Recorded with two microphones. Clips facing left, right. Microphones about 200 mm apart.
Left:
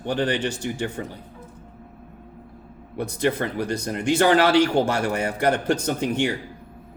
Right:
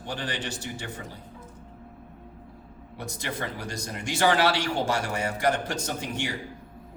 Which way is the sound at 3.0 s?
60° left (ahead or behind).